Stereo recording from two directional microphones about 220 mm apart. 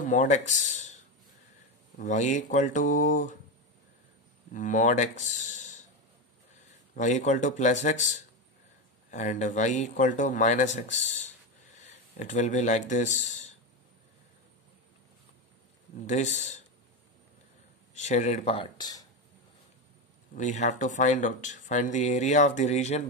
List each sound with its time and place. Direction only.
0.0 s speech: 35° left (ahead or behind)
2.0 s speech: 35° left (ahead or behind)
4.5 s speech: 35° left (ahead or behind)
7.0 s speech: 35° left (ahead or behind)
16.1 s speech: 30° left (ahead or behind)
17.9 s speech: 30° left (ahead or behind)
20.3 s speech: 35° left (ahead or behind)